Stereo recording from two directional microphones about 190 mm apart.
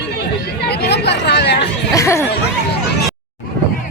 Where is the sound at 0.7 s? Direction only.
60° left (ahead or behind).